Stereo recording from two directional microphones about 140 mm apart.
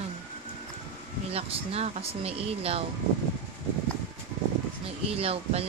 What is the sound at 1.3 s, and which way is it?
Speech, 45° right (ahead or behind).